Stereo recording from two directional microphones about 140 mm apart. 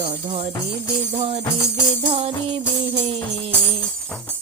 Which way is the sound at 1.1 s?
55° right (ahead or behind).